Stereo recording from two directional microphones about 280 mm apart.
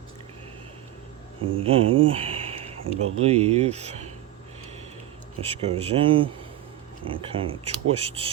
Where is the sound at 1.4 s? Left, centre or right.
Centre.